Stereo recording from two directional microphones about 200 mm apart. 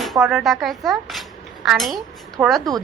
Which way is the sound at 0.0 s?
Centre (ahead or behind).